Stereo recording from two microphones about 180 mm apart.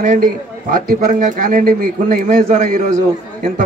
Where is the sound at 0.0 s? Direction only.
50° right (ahead or behind).